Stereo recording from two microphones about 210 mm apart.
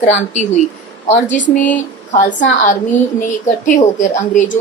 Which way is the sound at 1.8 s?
40° left (ahead or behind).